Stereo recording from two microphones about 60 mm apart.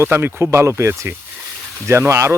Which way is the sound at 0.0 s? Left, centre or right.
Right.